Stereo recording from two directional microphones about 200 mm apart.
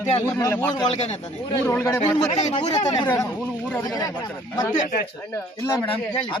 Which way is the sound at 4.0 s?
20° left (ahead or behind).